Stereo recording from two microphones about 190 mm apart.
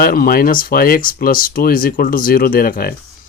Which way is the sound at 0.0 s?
50° left (ahead or behind).